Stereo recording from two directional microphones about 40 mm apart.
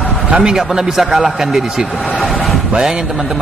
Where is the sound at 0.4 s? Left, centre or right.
Centre.